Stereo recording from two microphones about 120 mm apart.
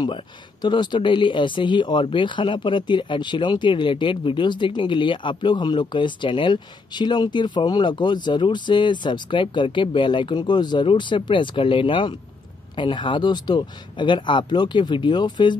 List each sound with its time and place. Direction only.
0.0 s speech: 40° left (ahead or behind)